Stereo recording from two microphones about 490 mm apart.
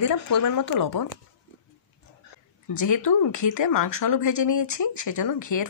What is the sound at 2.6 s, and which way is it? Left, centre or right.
Speech, left.